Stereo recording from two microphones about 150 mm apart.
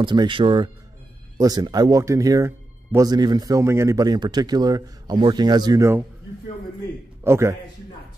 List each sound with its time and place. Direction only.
0.0 s speech: 30° right (ahead or behind)
7.2 s a man's voice: 15° right (ahead or behind)